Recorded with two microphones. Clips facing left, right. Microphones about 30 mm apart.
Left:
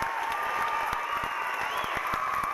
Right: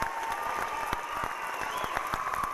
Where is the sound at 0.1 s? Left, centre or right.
Left.